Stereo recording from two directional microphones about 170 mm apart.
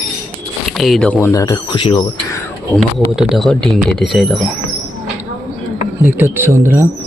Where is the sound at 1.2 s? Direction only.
20° left (ahead or behind).